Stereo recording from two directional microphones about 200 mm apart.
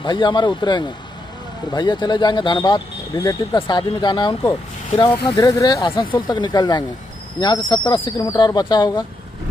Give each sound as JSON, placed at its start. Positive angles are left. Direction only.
{"t": 0.0, "sound": "speech", "side_deg": 20}